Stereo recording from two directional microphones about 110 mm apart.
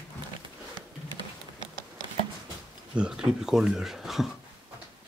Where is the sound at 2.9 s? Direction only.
5° right (ahead or behind).